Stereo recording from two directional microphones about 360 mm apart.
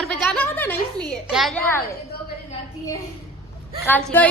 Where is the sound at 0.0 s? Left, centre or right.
Centre.